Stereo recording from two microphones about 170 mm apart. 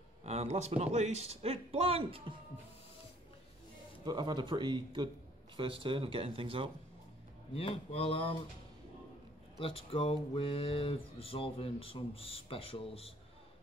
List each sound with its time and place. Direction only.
0.2 s a man's voice: 40° right (ahead or behind)
4.0 s a man's voice: 25° right (ahead or behind)
7.5 s speech: 35° left (ahead or behind)
9.6 s speech: 30° left (ahead or behind)